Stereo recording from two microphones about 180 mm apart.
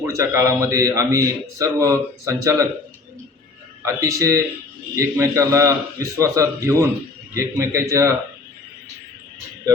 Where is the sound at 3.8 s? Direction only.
15° right (ahead or behind).